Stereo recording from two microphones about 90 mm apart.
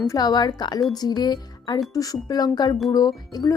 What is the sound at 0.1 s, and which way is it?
Speech, 45° left (ahead or behind).